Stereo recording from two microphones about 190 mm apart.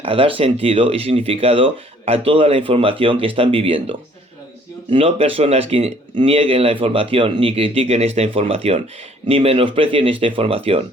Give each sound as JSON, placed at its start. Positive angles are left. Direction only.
{"t": 0.0, "sound": "speech", "side_deg": -30}